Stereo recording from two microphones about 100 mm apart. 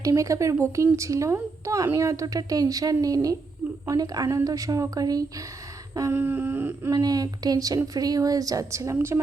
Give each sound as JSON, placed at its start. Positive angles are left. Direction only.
{"t": 0.0, "sound": "speech", "side_deg": -35}
{"t": 0.5, "sound": "whimper", "side_deg": -25}
{"t": 0.9, "sound": "speech", "side_deg": -30}
{"t": 5.9, "sound": "humming", "side_deg": -35}
{"t": 6.1, "sound": "whimper", "side_deg": -20}
{"t": 6.9, "sound": "speech", "side_deg": -40}